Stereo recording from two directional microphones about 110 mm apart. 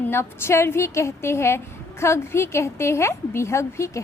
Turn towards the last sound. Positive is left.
turn(degrees=25)  # may be behind; listen again after turning